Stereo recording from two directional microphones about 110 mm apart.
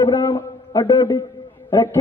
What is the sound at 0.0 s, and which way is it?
A man's voice, 20° left (ahead or behind).